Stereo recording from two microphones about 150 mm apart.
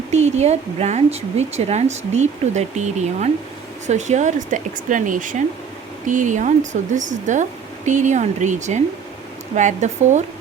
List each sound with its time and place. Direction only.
0.1 s speech: 50° right (ahead or behind)